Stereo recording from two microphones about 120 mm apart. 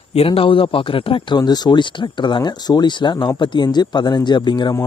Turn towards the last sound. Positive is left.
turn(degrees=40)  # may be behind; listen again after turning